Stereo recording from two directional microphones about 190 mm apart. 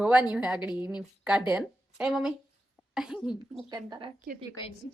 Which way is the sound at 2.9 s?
Centre (ahead or behind).